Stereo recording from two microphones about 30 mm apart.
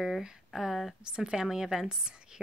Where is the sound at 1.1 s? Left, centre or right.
Right.